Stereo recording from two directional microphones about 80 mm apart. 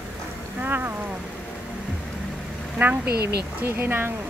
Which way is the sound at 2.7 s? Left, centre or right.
Right.